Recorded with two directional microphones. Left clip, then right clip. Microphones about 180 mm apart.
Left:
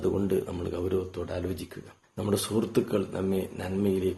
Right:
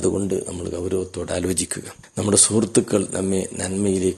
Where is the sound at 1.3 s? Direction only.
50° right (ahead or behind).